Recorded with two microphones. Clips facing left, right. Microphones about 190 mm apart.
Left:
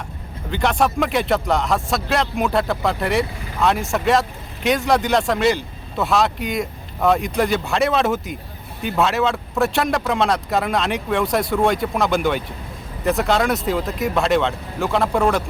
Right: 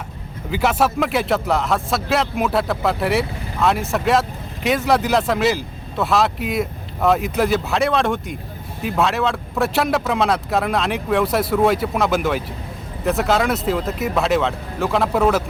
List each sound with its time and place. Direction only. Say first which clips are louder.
0.5 s speech: right 1 dB; 5° right (ahead or behind)